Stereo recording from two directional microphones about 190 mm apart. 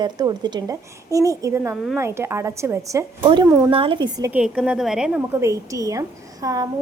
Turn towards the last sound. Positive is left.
turn(degrees=-20)  # may be behind; listen again after turning